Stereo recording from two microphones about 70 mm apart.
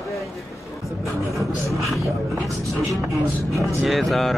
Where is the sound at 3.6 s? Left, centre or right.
Centre.